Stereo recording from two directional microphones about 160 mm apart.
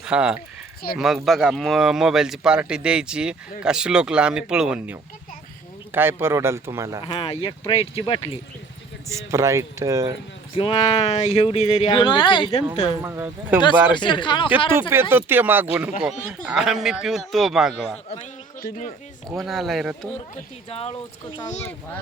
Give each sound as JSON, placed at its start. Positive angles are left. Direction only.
{"t": 0.0, "sound": "a man's voice", "side_deg": -5}
{"t": 7.0, "sound": "speech", "side_deg": 35}
{"t": 9.0, "sound": "speech", "side_deg": -20}
{"t": 10.5, "sound": "speech", "side_deg": 35}
{"t": 13.0, "sound": "a man's voice", "side_deg": -15}
{"t": 13.9, "sound": "speech", "side_deg": 30}
{"t": 14.7, "sound": "a man's voice", "side_deg": -15}
{"t": 18.6, "sound": "speech", "side_deg": 50}
{"t": 19.3, "sound": "speech", "side_deg": 0}
{"t": 20.3, "sound": "speech", "side_deg": 40}
{"t": 21.6, "sound": "a child's voice", "side_deg": 10}